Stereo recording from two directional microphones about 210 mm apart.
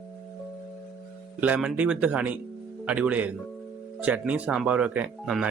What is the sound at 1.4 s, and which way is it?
Speech, 5° right (ahead or behind).